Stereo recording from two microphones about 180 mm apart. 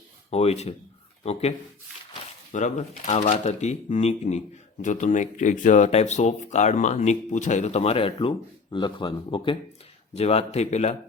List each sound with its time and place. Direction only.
0.3 s speech: 35° left (ahead or behind)